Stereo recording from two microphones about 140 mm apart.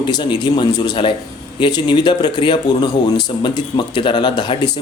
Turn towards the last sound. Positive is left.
turn(degrees=35)  # may be behind; listen again after turning